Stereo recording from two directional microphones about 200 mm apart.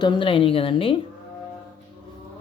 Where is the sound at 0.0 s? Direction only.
25° left (ahead or behind).